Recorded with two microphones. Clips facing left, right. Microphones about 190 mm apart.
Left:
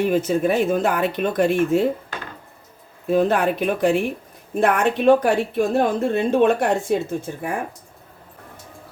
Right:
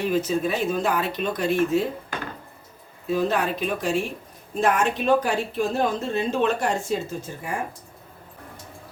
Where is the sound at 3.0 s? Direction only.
55° left (ahead or behind).